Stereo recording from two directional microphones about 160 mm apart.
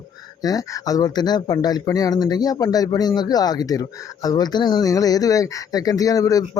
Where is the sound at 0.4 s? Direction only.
20° left (ahead or behind).